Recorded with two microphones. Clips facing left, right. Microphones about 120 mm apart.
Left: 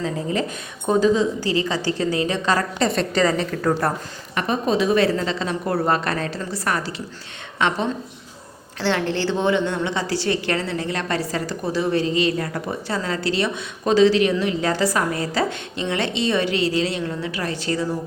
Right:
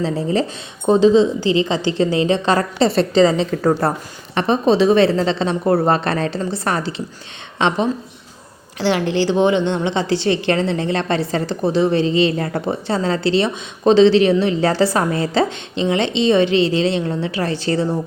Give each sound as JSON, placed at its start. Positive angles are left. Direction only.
{"t": 0.0, "sound": "a woman's voice", "side_deg": -35}
{"t": 8.8, "sound": "a woman's voice", "side_deg": -15}